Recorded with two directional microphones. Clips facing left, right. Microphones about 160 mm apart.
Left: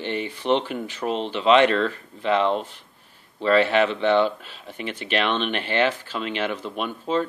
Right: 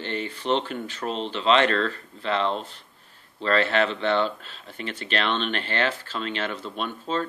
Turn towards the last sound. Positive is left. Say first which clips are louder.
# left 4 dB
turn(degrees=10)  # may be behind; listen again after turning